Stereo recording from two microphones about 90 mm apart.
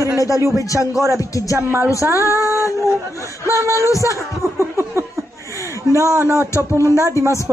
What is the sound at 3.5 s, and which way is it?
Speech, 35° right (ahead or behind).